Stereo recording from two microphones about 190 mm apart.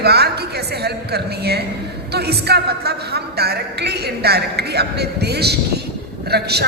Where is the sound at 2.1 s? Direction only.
60° right (ahead or behind).